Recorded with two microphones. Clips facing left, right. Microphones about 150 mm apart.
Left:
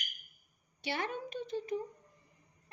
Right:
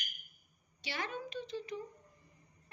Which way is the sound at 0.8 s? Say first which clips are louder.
Left 4 dB; 55° left (ahead or behind).